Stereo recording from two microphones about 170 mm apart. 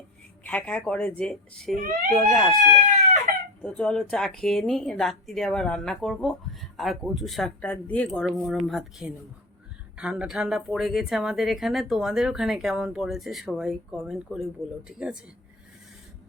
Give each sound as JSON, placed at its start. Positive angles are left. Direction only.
{"t": 0.4, "sound": "a woman's voice", "side_deg": 10}
{"t": 1.7, "sound": "speech", "side_deg": -50}
{"t": 2.0, "sound": "a woman's voice", "side_deg": 0}
{"t": 3.6, "sound": "a woman's voice", "side_deg": 5}